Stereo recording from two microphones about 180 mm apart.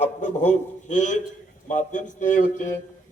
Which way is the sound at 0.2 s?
40° left (ahead or behind).